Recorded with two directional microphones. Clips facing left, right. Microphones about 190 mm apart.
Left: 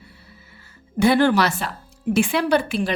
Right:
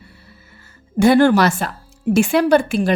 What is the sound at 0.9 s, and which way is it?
A woman's voice, 45° right (ahead or behind).